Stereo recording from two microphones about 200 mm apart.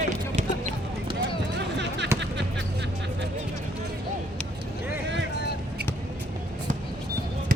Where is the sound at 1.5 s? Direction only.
60° right (ahead or behind).